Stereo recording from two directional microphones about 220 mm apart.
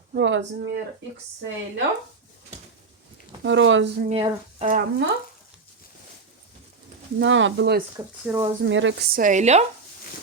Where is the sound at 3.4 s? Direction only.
55° right (ahead or behind).